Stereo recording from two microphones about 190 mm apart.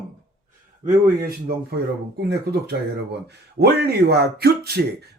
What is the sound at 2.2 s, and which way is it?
Speech, 60° right (ahead or behind).